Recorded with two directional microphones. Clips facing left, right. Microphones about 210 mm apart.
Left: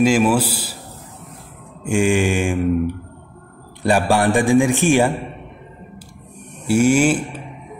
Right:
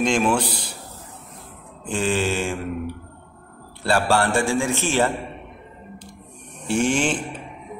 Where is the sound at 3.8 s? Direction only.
15° left (ahead or behind).